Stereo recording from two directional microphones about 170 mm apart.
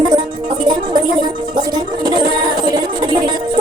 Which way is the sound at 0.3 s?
25° right (ahead or behind).